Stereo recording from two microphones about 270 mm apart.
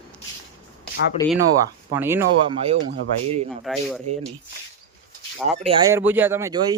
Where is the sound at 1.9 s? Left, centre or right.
Centre.